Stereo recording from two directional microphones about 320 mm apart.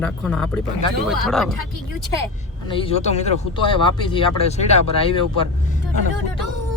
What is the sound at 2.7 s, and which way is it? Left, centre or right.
Speech, centre.